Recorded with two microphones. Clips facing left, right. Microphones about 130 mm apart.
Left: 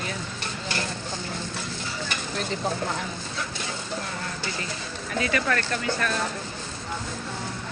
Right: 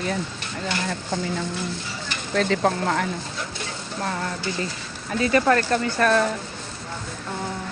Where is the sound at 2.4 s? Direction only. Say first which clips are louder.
Right 8 dB; 80° right.